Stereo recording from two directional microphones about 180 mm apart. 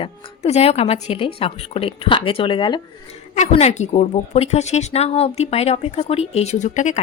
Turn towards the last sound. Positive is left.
turn(degrees=40)  # may be behind; listen again after turning